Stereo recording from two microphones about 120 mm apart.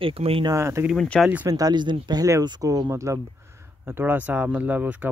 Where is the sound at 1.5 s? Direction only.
35° right (ahead or behind).